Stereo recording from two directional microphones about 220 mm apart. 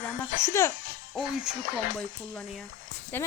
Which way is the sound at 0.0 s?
10° left (ahead or behind).